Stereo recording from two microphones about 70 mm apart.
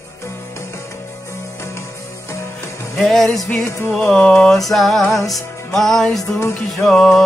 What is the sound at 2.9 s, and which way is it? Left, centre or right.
Music, centre.